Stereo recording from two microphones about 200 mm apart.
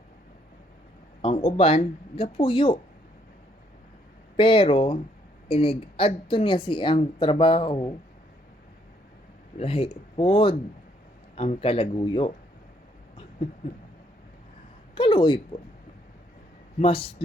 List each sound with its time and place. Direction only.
1.2 s speech: 30° left (ahead or behind)
4.4 s a woman's voice: 25° left (ahead or behind)
9.6 s a woman's voice: 30° left (ahead or behind)
14.9 s a woman's voice: 25° left (ahead or behind)
16.8 s a woman's voice: 30° left (ahead or behind)